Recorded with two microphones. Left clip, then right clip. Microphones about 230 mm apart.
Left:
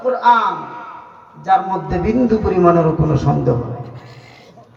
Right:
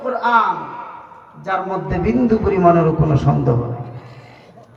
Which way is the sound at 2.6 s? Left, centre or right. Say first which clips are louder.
Even; right.